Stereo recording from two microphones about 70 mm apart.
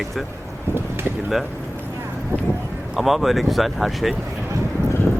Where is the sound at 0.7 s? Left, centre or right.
Right.